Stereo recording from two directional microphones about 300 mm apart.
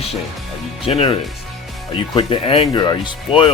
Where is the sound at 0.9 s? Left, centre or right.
Centre.